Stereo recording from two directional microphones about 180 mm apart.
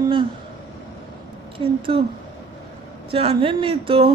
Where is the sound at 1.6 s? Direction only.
30° right (ahead or behind).